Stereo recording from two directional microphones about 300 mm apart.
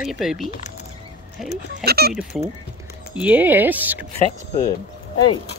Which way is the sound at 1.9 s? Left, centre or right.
Right.